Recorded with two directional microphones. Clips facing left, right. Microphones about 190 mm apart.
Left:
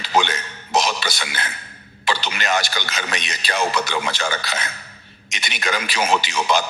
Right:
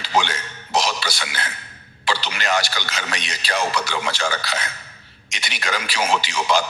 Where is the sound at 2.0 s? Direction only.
20° left (ahead or behind).